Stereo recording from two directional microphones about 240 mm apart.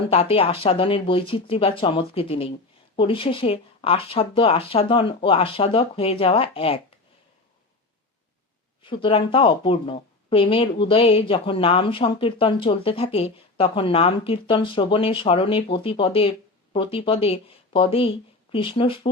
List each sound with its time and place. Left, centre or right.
0.1 s speech: left
8.8 s speech: left